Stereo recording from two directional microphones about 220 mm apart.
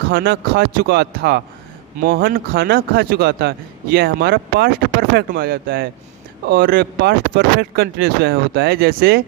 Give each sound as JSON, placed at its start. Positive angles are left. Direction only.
{"t": 0.1, "sound": "speech", "side_deg": -50}